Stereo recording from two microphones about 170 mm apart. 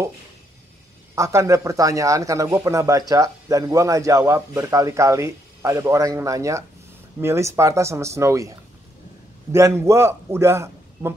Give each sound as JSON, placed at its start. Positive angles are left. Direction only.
{"t": 1.1, "sound": "speech", "side_deg": -15}